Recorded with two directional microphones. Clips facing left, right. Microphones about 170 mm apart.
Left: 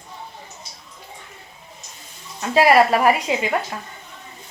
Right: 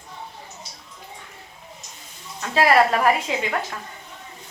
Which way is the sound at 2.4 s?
15° left (ahead or behind).